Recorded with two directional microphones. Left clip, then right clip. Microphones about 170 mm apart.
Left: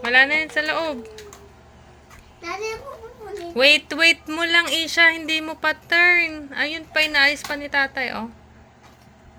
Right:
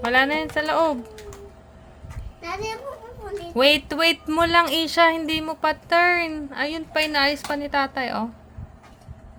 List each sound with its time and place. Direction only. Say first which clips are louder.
0.0 s speech: left 3 dB; 25° right (ahead or behind)
3.5 s speech: left 2 dB; 20° right (ahead or behind)